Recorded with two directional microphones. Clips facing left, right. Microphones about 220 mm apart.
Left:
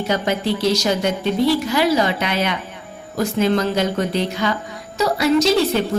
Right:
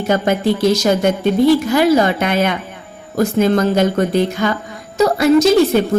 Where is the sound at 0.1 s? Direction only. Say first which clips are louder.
Right 6 dB; 50° right (ahead or behind).